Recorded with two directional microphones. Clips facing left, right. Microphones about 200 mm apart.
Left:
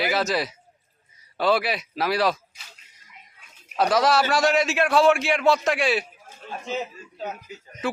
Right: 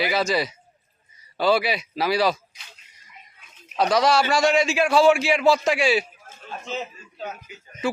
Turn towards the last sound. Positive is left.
turn(degrees=35)  # may be behind; listen again after turning